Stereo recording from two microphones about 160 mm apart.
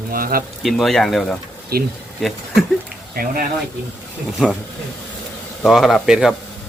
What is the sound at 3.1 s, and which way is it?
Speech, 65° right (ahead or behind).